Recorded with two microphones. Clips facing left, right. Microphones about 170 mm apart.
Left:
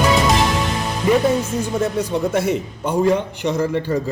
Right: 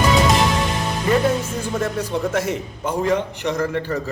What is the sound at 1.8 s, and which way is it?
A man's voice, 10° left (ahead or behind).